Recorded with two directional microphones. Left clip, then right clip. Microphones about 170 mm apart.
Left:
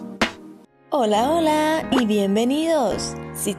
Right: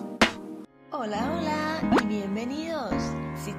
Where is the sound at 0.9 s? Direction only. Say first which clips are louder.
Left 11 dB; 45° left (ahead or behind).